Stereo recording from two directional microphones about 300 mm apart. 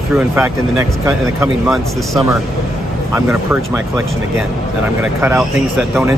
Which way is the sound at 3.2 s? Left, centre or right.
Centre.